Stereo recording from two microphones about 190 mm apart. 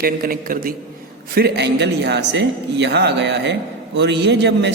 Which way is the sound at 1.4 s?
60° right (ahead or behind).